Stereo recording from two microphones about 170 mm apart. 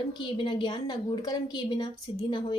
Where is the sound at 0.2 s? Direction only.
30° left (ahead or behind).